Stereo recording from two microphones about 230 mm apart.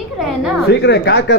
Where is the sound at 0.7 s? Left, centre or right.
Left.